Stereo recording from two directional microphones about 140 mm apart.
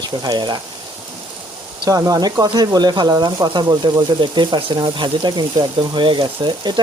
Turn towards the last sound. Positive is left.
turn(degrees=-30)  # may be behind; listen again after turning